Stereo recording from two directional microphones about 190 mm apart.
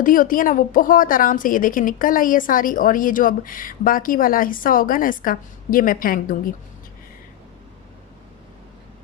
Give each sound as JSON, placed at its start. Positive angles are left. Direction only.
{"t": 0.0, "sound": "a woman's voice", "side_deg": 45}